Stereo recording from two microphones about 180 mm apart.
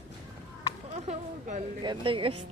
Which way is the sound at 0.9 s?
40° right (ahead or behind).